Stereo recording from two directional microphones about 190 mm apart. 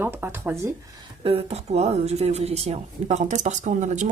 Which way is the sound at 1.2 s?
30° right (ahead or behind).